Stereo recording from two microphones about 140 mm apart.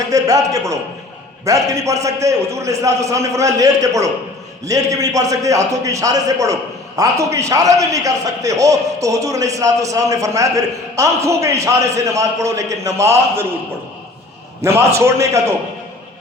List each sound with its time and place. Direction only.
0.1 s a man's voice: 25° right (ahead or behind)
14.6 s a man's voice: 20° right (ahead or behind)